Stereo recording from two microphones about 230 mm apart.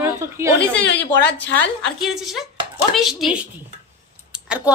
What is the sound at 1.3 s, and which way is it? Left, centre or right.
A woman's voice, centre.